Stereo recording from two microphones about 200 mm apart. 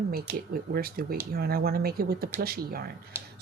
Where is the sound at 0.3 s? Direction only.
10° right (ahead or behind).